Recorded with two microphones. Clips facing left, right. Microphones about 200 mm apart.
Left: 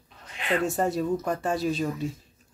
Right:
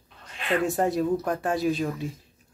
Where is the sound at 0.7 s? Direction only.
Centre (ahead or behind).